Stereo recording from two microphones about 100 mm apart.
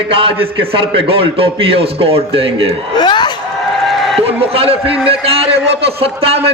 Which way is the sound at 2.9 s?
45° left (ahead or behind).